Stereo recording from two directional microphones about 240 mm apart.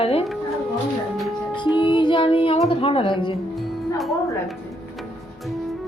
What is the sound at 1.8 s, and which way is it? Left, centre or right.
A woman's voice, centre.